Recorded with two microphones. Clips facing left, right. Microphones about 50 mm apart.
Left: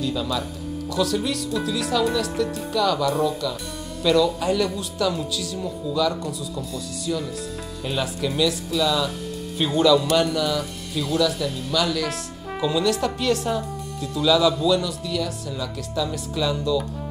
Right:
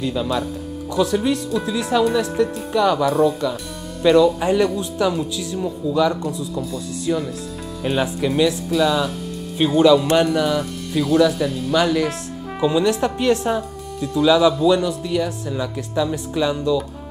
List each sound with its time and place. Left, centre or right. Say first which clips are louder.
0.0 s speech: right 4 dB; centre
3.1 s speech: right 5 dB; centre
4.0 s speech: right 5 dB; right
6.2 s speech: right 5 dB; centre
7.1 s speech: right 5 dB; right
7.8 s speech: right 6 dB; right; by 11.1 s centre
11.1 s speech: right 5 dB; centre
13.6 s speech: right 3 dB; centre